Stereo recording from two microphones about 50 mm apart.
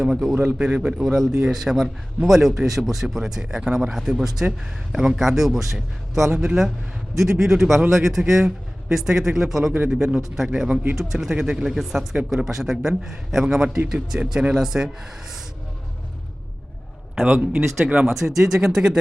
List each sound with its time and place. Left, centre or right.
0.0 s a man's voice: centre
17.5 s speech: centre
18.0 s a man's voice: centre